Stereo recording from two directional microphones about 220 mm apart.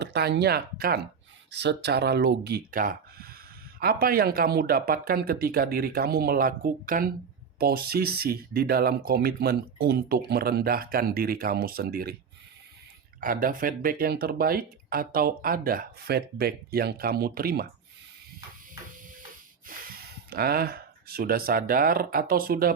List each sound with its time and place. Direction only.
0.0 s speech: 50° right (ahead or behind)
13.1 s speech: 40° right (ahead or behind)
19.7 s a sound: 40° right (ahead or behind)
20.3 s speech: 45° right (ahead or behind)